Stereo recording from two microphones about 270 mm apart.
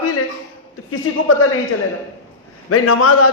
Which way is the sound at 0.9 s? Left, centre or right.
Left.